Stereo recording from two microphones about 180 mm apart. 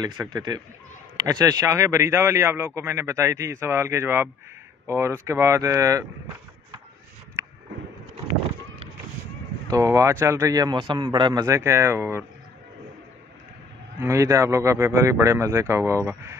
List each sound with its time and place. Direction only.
0.0 s a man's voice: 20° right (ahead or behind)
9.7 s a man's voice: 20° right (ahead or behind)
13.9 s a man's voice: 15° right (ahead or behind)